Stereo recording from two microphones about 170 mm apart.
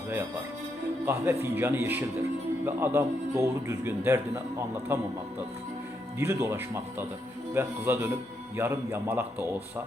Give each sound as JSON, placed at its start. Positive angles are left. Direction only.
{"t": 1.0, "sound": "speech", "side_deg": -15}
{"t": 6.1, "sound": "speech", "side_deg": -15}